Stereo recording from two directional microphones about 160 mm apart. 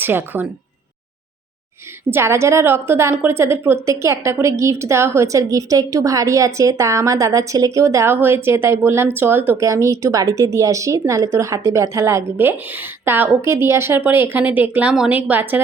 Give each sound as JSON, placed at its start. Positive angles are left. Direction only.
{"t": 0.0, "sound": "speech", "side_deg": -15}
{"t": 2.0, "sound": "a woman's voice", "side_deg": -15}